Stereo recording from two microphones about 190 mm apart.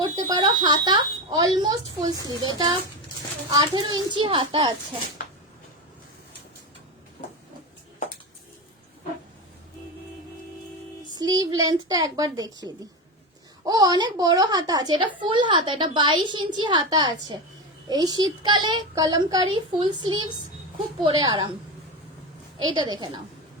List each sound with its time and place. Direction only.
0.0 s a woman's voice: 20° right (ahead or behind)
11.1 s a woman's voice: 20° right (ahead or behind)
22.5 s a woman's voice: 25° right (ahead or behind)